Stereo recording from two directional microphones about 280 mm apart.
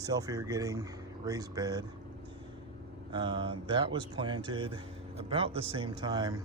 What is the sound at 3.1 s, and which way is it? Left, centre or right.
Speech, centre.